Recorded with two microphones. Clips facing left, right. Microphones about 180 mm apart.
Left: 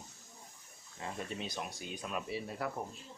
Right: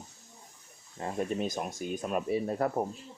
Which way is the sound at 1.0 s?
45° right (ahead or behind).